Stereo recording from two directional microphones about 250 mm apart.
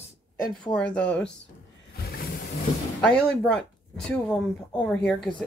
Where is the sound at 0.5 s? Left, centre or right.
Centre.